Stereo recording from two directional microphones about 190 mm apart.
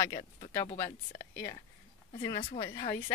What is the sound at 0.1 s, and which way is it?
Speech, 25° left (ahead or behind).